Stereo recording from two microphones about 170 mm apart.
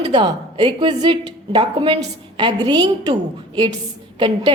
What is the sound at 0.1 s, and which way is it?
A man's voice, 30° right (ahead or behind).